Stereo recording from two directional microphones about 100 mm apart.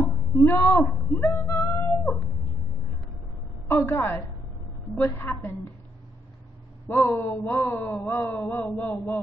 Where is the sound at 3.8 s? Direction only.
20° left (ahead or behind).